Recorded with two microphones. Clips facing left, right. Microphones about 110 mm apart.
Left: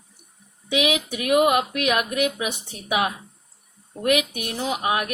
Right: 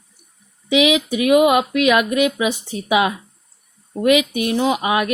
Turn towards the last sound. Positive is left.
turn(degrees=-90)